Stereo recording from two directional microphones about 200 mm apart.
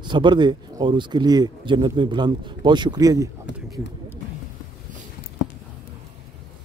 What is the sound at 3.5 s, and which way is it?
Speech, 65° left (ahead or behind).